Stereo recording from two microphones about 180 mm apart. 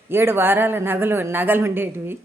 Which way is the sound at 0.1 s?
10° right (ahead or behind).